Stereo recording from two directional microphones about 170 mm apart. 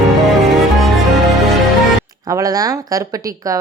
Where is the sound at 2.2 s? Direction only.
20° right (ahead or behind).